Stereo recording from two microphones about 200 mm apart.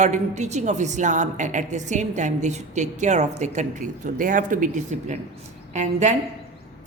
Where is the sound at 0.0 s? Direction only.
35° right (ahead or behind).